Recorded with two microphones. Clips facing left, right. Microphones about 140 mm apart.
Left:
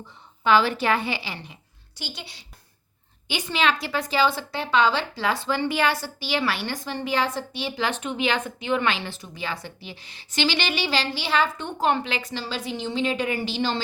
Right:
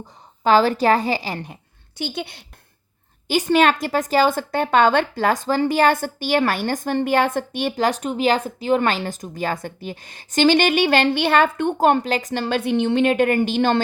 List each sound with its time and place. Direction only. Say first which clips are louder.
0.0 s a woman's voice: right 5 dB; 40° right (ahead or behind)
2.0 s a woman's voice: right 11 dB; 55° right (ahead or behind)
3.2 s a woman's voice: right 8 dB; 45° right (ahead or behind)